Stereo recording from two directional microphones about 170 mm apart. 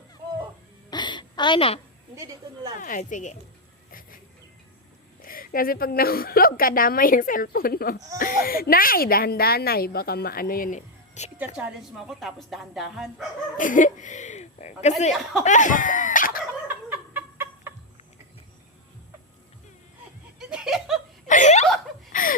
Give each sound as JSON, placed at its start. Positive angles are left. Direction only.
{"t": 0.9, "sound": "a sound", "side_deg": 25}
{"t": 2.1, "sound": "a woman's voice", "side_deg": -20}
{"t": 2.8, "sound": "speech", "side_deg": 50}
{"t": 5.2, "sound": "a woman's voice", "side_deg": 55}
{"t": 11.3, "sound": "a woman's voice", "side_deg": -10}
{"t": 13.6, "sound": "speech", "side_deg": 50}
{"t": 15.1, "sound": "a woman's voice", "side_deg": 0}
{"t": 15.4, "sound": "a sound", "side_deg": 45}
{"t": 16.6, "sound": "chicken", "side_deg": -10}
{"t": 20.4, "sound": "laughter", "side_deg": -5}
{"t": 21.2, "sound": "chuckle", "side_deg": 45}
{"t": 22.1, "sound": "a sound", "side_deg": 55}